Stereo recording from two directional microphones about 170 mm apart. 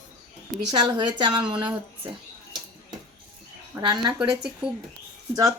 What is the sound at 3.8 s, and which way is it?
Speech, 25° right (ahead or behind).